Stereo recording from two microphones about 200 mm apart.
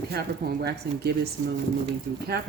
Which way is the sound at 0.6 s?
55° right (ahead or behind).